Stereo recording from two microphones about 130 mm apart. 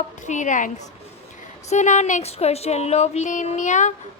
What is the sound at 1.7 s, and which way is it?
Speech, 65° left (ahead or behind).